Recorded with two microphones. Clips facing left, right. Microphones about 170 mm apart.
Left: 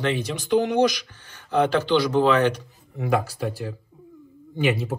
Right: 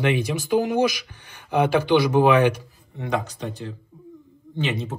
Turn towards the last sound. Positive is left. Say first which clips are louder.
# left 3 dB
turn(degrees=10)  # may be behind; listen again after turning